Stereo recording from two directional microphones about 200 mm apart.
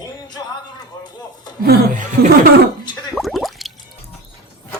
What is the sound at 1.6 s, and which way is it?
Speech, 50° right (ahead or behind).